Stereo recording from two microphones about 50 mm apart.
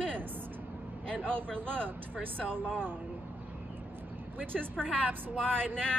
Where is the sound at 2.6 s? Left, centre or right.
Centre.